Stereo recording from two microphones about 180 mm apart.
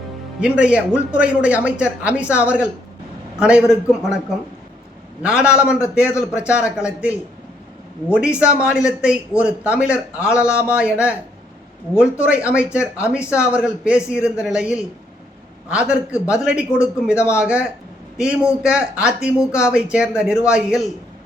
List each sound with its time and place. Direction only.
0.3 s speech: 5° right (ahead or behind)